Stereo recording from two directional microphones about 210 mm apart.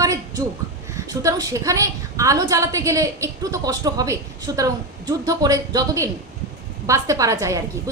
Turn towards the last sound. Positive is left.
turn(degrees=-15)  # may be behind; listen again after turning